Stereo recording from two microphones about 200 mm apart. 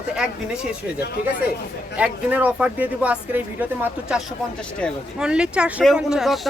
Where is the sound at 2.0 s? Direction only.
5° right (ahead or behind).